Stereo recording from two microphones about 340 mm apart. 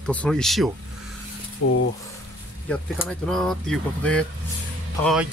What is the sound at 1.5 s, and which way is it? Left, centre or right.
Speech, left.